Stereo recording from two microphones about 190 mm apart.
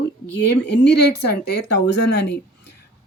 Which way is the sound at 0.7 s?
60° left (ahead or behind).